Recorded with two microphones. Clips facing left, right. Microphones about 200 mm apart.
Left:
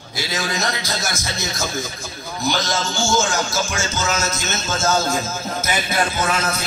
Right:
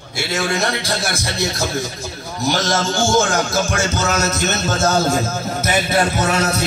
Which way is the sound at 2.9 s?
55° right (ahead or behind).